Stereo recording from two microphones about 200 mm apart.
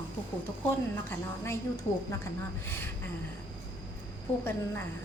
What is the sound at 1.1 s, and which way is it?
A woman's voice, 15° left (ahead or behind).